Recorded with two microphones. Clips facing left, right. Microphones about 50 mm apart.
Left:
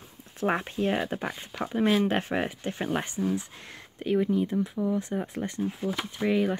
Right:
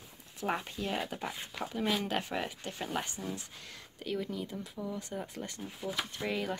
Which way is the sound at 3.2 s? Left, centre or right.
Centre.